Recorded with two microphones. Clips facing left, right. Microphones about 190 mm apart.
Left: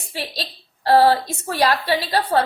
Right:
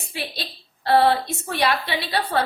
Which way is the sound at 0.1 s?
35° left (ahead or behind).